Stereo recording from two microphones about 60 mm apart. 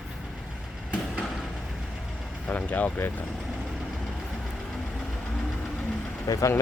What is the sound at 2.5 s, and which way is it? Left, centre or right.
Speech, left.